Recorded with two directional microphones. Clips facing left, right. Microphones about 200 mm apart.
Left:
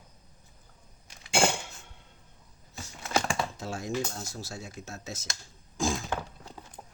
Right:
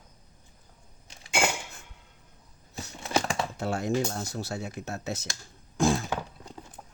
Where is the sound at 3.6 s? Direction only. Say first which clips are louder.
Right 5 dB; 60° right (ahead or behind).